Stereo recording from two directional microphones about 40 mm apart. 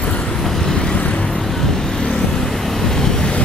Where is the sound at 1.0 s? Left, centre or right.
Left.